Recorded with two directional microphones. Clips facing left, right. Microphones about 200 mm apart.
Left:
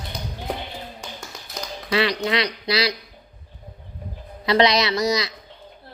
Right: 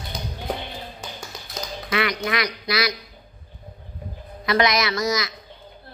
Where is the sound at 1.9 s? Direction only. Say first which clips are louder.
Left 3 dB; 30° left (ahead or behind).